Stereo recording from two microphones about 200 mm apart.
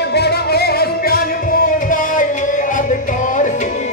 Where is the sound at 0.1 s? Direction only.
55° left (ahead or behind).